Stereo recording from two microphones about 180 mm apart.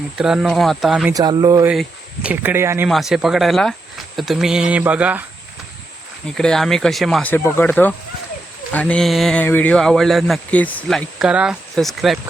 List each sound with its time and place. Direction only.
0.2 s speech: 5° right (ahead or behind)
1.1 s speech: 20° right (ahead or behind)
1.6 s speech: 5° right (ahead or behind)
2.9 s speech: centre (ahead or behind)
6.3 s speech: 5° left (ahead or behind)